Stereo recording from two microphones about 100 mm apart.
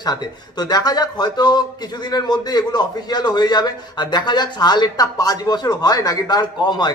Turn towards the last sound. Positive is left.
turn(degrees=45)  # may be behind; listen again after turning